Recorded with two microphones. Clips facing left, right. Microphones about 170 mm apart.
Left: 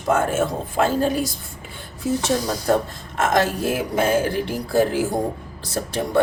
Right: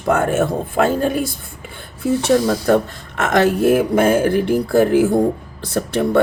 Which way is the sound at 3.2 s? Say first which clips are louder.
Right 5 dB; 65° right (ahead or behind).